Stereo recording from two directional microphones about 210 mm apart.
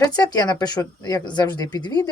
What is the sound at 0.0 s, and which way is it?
A woman's voice, 20° left (ahead or behind).